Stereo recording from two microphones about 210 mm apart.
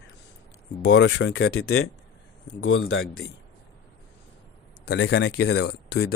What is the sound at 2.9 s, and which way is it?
Speech, 70° left (ahead or behind).